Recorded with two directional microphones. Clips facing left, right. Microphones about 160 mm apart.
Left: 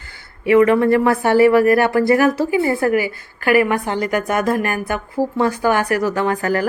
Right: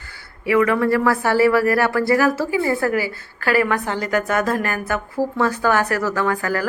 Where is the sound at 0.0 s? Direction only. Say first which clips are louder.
Left 4 dB; 20° left (ahead or behind).